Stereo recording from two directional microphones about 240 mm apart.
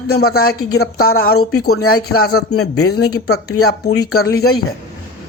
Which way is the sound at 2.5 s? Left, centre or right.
Left.